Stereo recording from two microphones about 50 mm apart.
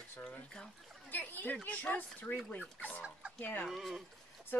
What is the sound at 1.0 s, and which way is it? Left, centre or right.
Speech, left.